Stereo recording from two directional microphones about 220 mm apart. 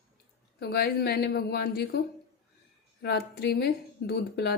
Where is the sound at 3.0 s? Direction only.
50° left (ahead or behind).